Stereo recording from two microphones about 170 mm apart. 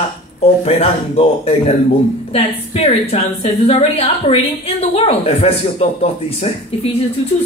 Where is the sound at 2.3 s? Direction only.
40° left (ahead or behind).